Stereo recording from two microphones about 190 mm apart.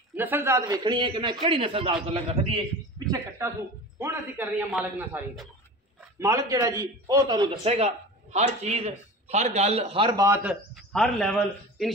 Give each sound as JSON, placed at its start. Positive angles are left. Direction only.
{"t": 0.1, "sound": "a man's voice", "side_deg": -10}
{"t": 3.1, "sound": "a man's voice", "side_deg": -15}
{"t": 6.1, "sound": "a man's voice", "side_deg": -15}
{"t": 7.6, "sound": "a man's voice", "side_deg": -30}